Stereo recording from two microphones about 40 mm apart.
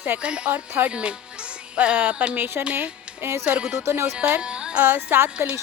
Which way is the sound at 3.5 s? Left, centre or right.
Right.